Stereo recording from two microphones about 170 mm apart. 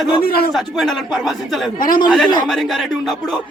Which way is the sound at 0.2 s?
60° left (ahead or behind).